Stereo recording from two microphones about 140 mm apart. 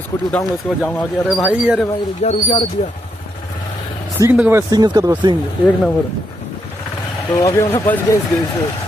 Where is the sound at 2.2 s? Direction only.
40° left (ahead or behind).